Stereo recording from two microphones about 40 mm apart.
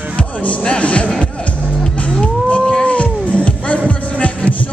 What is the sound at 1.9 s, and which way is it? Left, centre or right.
Cat, left.